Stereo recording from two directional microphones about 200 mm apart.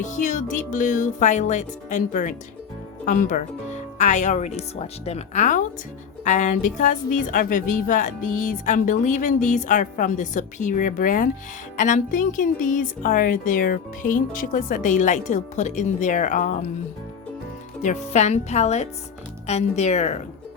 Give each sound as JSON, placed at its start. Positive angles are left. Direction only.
{"t": 0.0, "sound": "a woman's voice", "side_deg": 40}
{"t": 17.8, "sound": "a woman's voice", "side_deg": 35}